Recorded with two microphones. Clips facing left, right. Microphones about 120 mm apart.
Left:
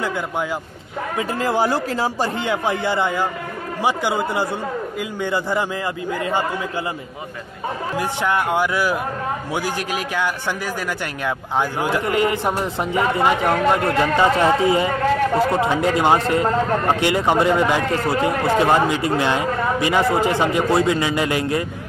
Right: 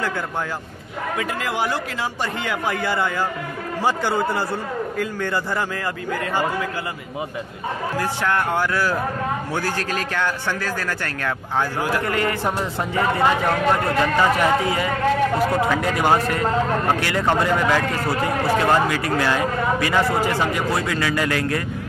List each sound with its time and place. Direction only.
1.1 s a man's voice: 35° left (ahead or behind); by 5.7 s 15° left (ahead or behind)
8.0 s a man's voice: 15° left (ahead or behind)